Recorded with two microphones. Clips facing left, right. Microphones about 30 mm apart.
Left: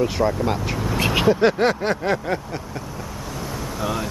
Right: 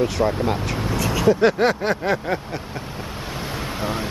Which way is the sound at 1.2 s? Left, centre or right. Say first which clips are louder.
Right 2 dB; centre.